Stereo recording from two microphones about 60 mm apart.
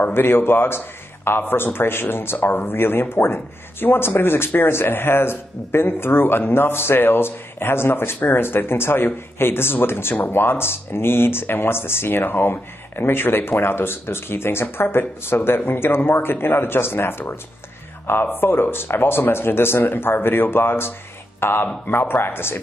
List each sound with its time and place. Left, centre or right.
0.0 s speech: left